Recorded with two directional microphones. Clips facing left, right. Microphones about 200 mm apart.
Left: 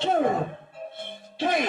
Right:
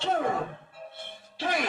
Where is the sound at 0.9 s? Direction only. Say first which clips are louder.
Left 8 dB; 20° left (ahead or behind).